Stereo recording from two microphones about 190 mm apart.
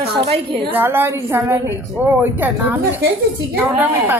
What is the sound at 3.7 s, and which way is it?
Speech, 10° right (ahead or behind).